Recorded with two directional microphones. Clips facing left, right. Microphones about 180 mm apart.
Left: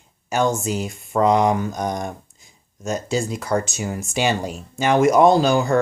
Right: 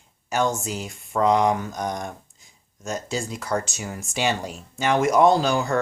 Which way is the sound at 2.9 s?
15° left (ahead or behind).